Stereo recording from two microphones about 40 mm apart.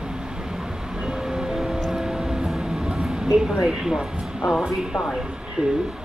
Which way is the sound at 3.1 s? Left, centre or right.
Centre.